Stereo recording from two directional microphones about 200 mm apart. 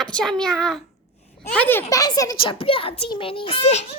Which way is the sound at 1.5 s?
10° left (ahead or behind).